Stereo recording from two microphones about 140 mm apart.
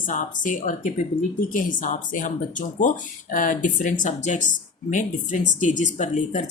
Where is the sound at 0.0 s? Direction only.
70° left (ahead or behind).